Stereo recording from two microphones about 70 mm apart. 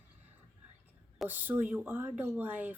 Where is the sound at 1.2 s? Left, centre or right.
Right.